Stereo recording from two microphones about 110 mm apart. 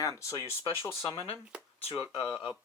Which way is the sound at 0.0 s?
25° left (ahead or behind).